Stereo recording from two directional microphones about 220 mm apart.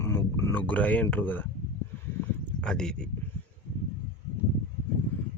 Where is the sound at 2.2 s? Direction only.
5° left (ahead or behind).